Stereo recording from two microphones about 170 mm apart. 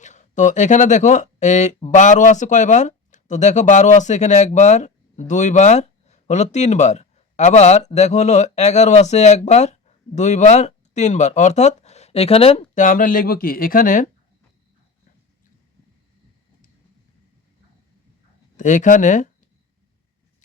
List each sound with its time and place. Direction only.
0.0 s speech: 45° left (ahead or behind)
18.5 s speech: 45° left (ahead or behind)